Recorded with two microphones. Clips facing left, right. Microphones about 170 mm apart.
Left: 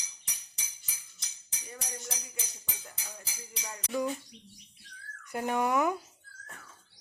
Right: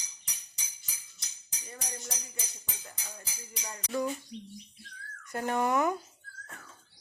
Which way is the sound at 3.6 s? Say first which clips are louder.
Even; centre (ahead or behind).